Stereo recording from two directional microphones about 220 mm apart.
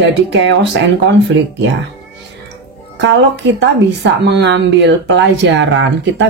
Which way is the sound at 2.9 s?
55° right (ahead or behind).